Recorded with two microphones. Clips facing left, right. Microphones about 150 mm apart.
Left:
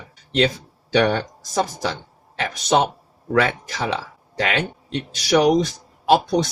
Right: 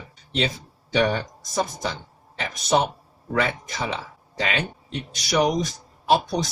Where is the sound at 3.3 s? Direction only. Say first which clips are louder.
Left 5 dB; 70° left (ahead or behind).